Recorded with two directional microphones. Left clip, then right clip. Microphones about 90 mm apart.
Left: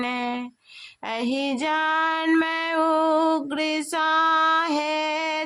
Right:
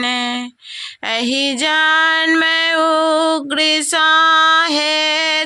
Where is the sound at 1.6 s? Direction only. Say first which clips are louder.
Right 9 dB; 20° right (ahead or behind).